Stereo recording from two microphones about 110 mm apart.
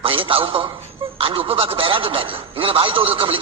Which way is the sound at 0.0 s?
55° right (ahead or behind).